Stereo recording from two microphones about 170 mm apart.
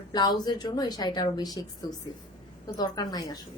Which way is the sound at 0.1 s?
25° left (ahead or behind).